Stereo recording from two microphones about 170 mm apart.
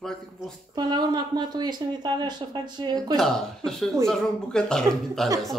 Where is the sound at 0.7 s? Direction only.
25° right (ahead or behind).